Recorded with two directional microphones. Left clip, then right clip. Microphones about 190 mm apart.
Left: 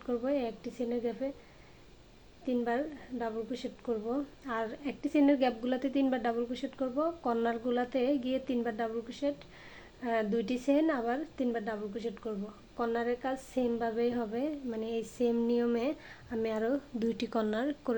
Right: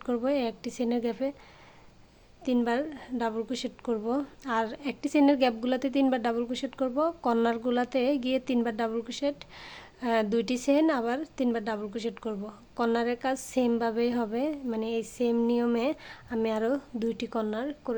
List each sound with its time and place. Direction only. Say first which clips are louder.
0.0 s a woman's voice: right 4 dB; 35° right (ahead or behind)
2.4 s a woman's voice: right 4 dB; 40° right (ahead or behind); by 17.9 s 15° right (ahead or behind)